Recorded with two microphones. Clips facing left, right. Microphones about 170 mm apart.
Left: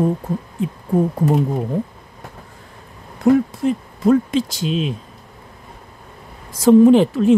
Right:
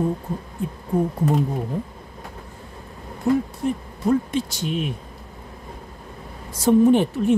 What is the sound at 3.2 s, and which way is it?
Speech, 90° left.